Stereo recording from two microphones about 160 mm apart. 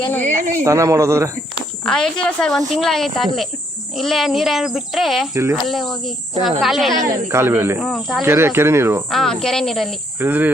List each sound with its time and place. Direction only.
0.6 s a man's voice: 20° right (ahead or behind)
1.8 s speech: 5° left (ahead or behind)
5.3 s speech: 15° right (ahead or behind)
5.6 s speech: centre (ahead or behind)
7.0 s speech: 20° right (ahead or behind)
7.8 s speech: centre (ahead or behind)
8.2 s speech: 15° right (ahead or behind)
9.0 s speech: centre (ahead or behind)
10.2 s speech: 10° right (ahead or behind)